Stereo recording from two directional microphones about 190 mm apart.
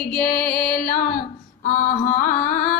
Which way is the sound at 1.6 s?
40° left (ahead or behind).